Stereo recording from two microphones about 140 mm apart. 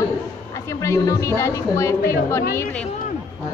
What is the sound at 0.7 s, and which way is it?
A woman's voice, 20° left (ahead or behind).